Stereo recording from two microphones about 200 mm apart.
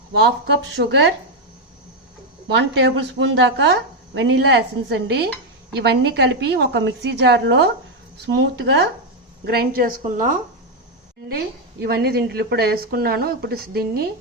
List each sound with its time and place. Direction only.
0.2 s a woman's voice: 55° right (ahead or behind)
2.5 s a woman's voice: 60° right (ahead or behind); by 10.4 s 40° right (ahead or behind)
11.8 s speech: 50° right (ahead or behind)